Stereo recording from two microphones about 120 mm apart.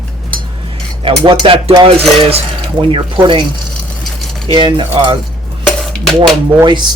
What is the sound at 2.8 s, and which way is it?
Speech, 45° right (ahead or behind).